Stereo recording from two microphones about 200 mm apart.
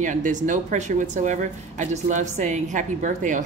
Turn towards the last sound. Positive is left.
turn(degrees=-40)  # may be behind; listen again after turning